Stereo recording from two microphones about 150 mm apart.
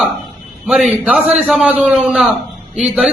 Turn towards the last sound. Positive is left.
turn(degrees=-5)  # may be behind; listen again after turning